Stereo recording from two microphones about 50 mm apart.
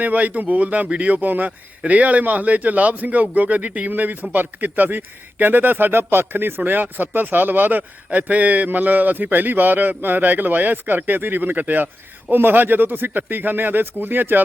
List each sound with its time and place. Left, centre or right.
0.0 s speech: right